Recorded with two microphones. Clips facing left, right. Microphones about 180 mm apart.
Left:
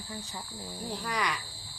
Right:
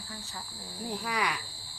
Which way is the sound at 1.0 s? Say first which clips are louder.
Even; 5° right (ahead or behind).